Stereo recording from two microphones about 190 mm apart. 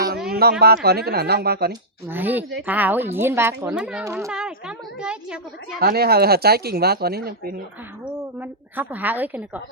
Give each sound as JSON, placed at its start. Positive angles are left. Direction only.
{"t": 0.3, "sound": "a sound", "side_deg": -55}
{"t": 0.6, "sound": "speech", "side_deg": -55}
{"t": 2.0, "sound": "a woman's voice", "side_deg": -10}
{"t": 4.3, "sound": "a child's voice", "side_deg": -5}
{"t": 5.8, "sound": "speech", "side_deg": -55}
{"t": 8.0, "sound": "a woman's voice", "side_deg": -10}